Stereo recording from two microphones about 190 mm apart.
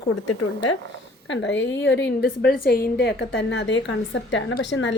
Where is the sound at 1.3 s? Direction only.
70° left (ahead or behind).